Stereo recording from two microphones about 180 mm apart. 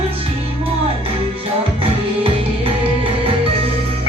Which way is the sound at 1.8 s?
30° right (ahead or behind).